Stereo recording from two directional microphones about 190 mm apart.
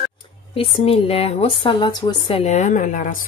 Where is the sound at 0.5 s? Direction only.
30° left (ahead or behind).